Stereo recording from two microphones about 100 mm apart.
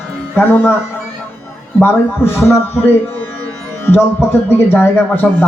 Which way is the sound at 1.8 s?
20° left (ahead or behind).